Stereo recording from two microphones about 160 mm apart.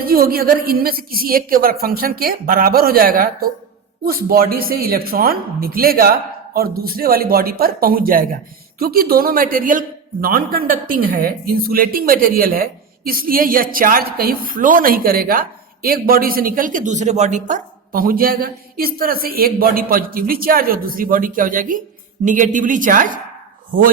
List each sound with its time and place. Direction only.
0.0 s a woman's voice: 65° right (ahead or behind)